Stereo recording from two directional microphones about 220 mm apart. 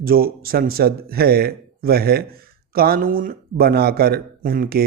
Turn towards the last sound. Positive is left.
turn(degrees=-40)  # may be behind; listen again after turning